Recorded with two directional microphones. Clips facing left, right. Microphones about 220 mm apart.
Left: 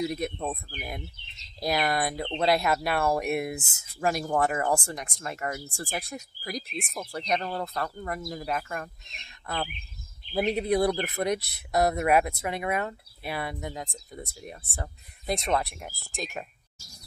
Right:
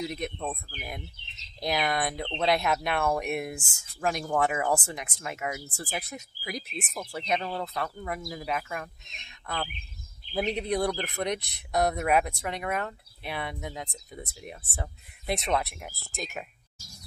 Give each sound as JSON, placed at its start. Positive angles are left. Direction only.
{"t": 0.0, "sound": "speech", "side_deg": 5}